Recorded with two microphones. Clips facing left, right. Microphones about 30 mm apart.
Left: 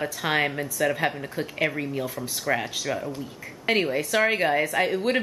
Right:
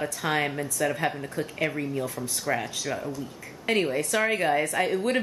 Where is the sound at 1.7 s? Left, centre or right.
Centre.